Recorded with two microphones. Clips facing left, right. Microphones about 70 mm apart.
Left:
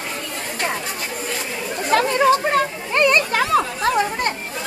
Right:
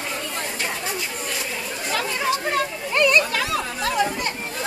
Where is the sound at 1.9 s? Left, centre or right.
Left.